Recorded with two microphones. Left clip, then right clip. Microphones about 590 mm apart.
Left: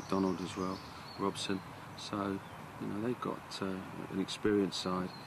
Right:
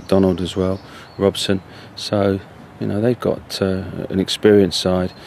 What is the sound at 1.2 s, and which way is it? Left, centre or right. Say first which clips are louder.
Speech: right 19 dB; right.